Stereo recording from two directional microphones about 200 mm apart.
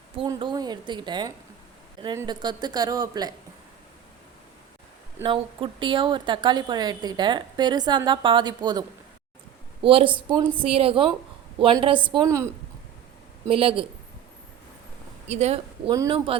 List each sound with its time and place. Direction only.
0.2 s a woman's voice: 25° right (ahead or behind)
5.2 s a woman's voice: 25° right (ahead or behind)
9.8 s a woman's voice: 25° right (ahead or behind)
13.5 s a woman's voice: 25° right (ahead or behind)
15.3 s speech: 35° right (ahead or behind)
15.9 s a woman's voice: 20° right (ahead or behind)